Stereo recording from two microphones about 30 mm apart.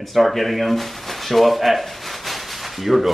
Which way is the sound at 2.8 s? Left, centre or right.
Centre.